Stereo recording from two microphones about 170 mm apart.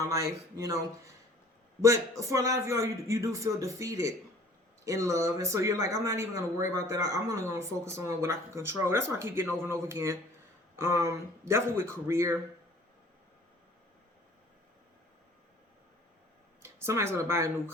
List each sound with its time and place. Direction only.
0.0 s speech: 20° right (ahead or behind)
16.6 s speech: 15° right (ahead or behind)